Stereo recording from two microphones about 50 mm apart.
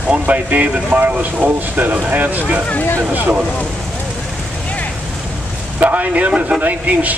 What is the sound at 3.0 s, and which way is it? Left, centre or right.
Speech, right.